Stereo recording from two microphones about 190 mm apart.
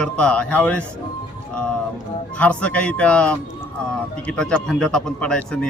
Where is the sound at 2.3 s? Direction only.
5° left (ahead or behind).